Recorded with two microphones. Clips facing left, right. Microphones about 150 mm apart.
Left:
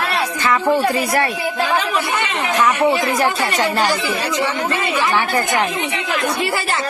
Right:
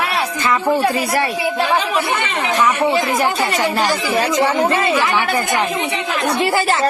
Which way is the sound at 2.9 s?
25° right (ahead or behind).